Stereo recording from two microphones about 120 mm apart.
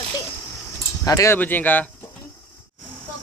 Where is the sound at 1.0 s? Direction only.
25° left (ahead or behind).